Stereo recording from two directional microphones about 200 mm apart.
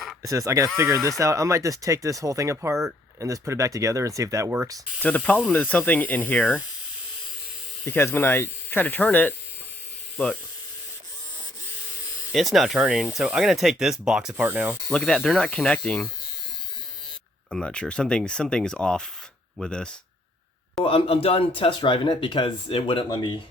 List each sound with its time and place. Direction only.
0.2 s speech: 15° right (ahead or behind)
5.0 s speech: 10° left (ahead or behind)
7.9 s speech: 10° left (ahead or behind)
12.3 s speech: centre (ahead or behind)
17.5 s speech: 5° left (ahead or behind)
20.8 s speech: 30° left (ahead or behind)